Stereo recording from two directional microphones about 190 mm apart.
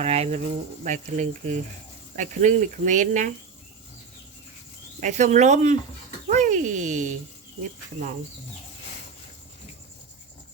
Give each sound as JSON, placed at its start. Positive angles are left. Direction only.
{"t": 0.0, "sound": "speech", "side_deg": -35}
{"t": 4.9, "sound": "speech", "side_deg": -40}